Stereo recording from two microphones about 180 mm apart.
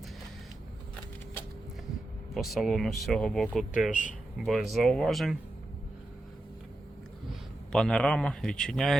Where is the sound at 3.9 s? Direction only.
45° left (ahead or behind).